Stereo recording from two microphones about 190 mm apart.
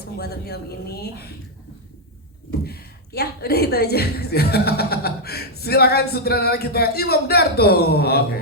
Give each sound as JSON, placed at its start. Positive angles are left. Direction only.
{"t": 0.0, "sound": "a woman's voice", "side_deg": 55}
{"t": 2.6, "sound": "a woman's voice", "side_deg": 55}